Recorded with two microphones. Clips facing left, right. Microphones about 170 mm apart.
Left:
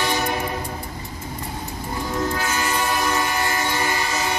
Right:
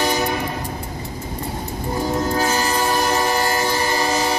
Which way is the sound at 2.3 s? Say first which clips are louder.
Right 4 dB; 35° right (ahead or behind).